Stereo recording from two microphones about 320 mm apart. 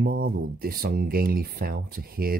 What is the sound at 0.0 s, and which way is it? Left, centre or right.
Speech, right.